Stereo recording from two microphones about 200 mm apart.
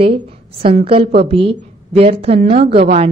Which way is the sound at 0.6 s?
30° right (ahead or behind).